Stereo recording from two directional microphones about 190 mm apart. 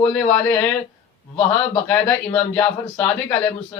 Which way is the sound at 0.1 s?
5° left (ahead or behind).